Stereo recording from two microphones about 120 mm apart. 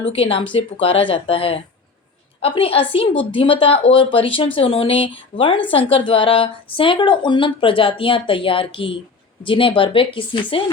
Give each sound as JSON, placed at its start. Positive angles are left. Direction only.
{"t": 0.1, "sound": "speech", "side_deg": 50}